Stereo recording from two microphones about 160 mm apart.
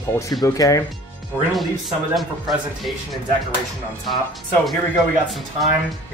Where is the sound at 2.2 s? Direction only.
Centre (ahead or behind).